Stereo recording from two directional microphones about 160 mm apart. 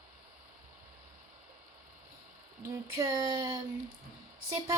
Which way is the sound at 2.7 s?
20° right (ahead or behind).